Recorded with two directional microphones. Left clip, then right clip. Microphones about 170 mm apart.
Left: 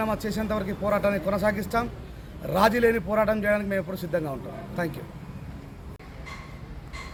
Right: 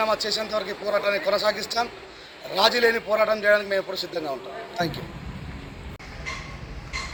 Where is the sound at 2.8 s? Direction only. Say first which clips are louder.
Right 2 dB; 10° left (ahead or behind).